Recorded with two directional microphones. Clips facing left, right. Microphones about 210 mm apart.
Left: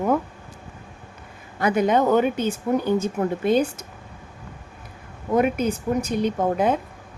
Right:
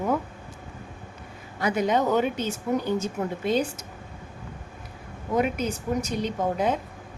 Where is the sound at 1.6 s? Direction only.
55° left (ahead or behind).